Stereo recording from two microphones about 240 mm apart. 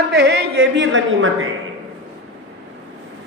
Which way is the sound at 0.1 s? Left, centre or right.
Right.